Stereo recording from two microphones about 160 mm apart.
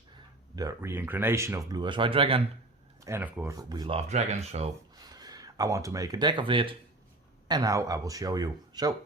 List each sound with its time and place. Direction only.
0.5 s speech: 20° right (ahead or behind)
1.8 s speech: 30° right (ahead or behind)
3.0 s speech: 15° right (ahead or behind)
3.6 s speech: 25° right (ahead or behind); by 4.7 s 40° right (ahead or behind)
4.9 s speech: 25° right (ahead or behind)